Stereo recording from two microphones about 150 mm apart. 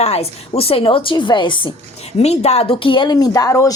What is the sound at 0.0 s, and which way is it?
Speech, 45° left (ahead or behind).